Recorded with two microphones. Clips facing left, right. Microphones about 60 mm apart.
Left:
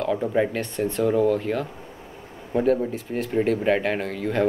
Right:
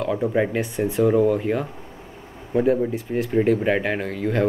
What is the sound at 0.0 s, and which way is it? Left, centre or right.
Speech, centre.